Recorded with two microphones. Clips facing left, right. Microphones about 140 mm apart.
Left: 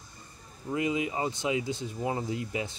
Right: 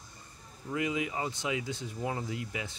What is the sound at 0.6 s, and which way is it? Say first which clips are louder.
Speech: left 3 dB; 25° left (ahead or behind).